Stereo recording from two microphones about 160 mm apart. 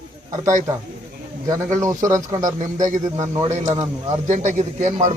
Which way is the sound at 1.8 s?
20° right (ahead or behind).